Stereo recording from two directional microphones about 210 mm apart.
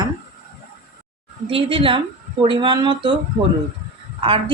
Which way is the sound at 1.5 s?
25° right (ahead or behind).